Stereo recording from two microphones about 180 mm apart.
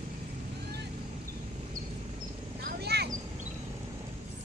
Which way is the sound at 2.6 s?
60° right (ahead or behind).